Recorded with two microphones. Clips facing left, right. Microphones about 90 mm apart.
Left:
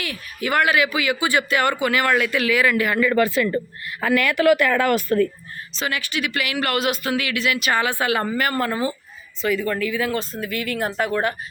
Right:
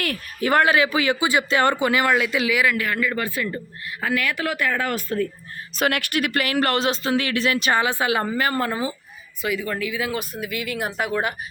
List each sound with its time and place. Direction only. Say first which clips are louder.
0.3 s speech: right 1 dB; 35° right (ahead or behind)
1.2 s speech: left 1 dB; 20° right (ahead or behind)
3.1 s a woman's voice: left 7 dB; 70° left (ahead or behind)
4.0 s a woman's voice: left 7 dB; 60° left (ahead or behind)
5.7 s speech: right 4 dB; 65° right (ahead or behind); by 7.8 s 30° right (ahead or behind)
7.8 s speech: even; 20° right (ahead or behind)